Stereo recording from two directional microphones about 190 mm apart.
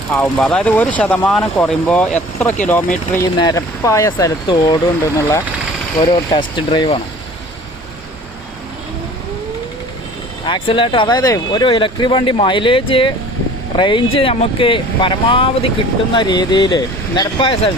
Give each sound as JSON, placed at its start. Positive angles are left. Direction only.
{"t": 0.1, "sound": "speech", "side_deg": 5}
{"t": 3.3, "sound": "speech", "side_deg": 20}
{"t": 10.4, "sound": "speech", "side_deg": 25}